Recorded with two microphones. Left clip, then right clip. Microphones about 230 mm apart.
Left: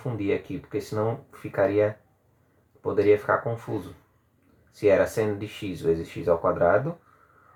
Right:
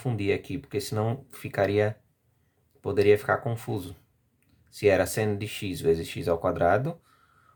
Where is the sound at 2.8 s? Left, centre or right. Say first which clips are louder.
Left 1 dB; right.